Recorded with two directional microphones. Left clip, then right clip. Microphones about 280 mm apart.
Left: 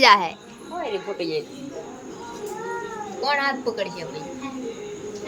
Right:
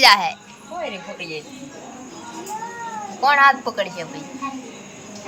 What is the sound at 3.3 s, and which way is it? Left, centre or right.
Speech, centre.